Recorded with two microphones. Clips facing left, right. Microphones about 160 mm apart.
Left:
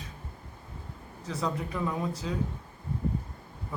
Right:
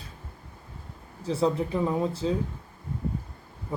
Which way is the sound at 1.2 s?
30° right (ahead or behind).